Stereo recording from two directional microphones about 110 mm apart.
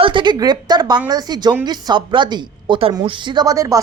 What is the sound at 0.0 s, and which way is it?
A woman's voice, 45° right (ahead or behind).